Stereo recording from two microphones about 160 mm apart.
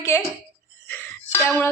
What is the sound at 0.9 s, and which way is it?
Music, 15° left (ahead or behind).